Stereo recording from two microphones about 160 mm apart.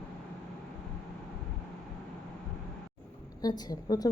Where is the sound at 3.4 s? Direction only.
25° left (ahead or behind).